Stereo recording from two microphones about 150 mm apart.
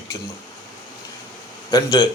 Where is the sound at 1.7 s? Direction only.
25° left (ahead or behind).